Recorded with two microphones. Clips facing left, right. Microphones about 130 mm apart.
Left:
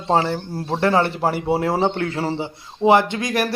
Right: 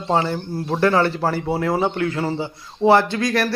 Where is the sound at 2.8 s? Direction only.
15° left (ahead or behind).